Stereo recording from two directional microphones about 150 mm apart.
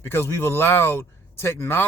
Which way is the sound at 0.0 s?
15° left (ahead or behind).